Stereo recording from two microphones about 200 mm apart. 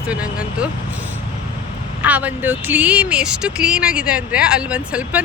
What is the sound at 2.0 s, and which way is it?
Speech, 5° right (ahead or behind).